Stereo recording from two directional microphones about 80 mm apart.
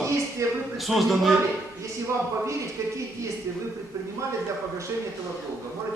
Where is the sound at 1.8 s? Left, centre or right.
Right.